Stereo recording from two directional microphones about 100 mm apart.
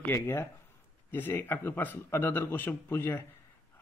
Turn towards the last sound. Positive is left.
turn(degrees=25)  # may be behind; listen again after turning